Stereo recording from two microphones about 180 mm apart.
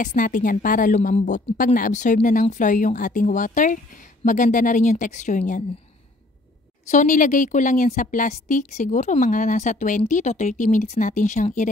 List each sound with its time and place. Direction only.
0.0 s a woman's voice: 45° left (ahead or behind)
6.9 s a woman's voice: 45° left (ahead or behind)